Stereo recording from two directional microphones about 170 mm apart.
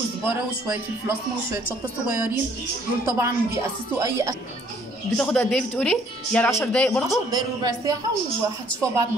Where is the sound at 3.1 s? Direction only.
15° right (ahead or behind).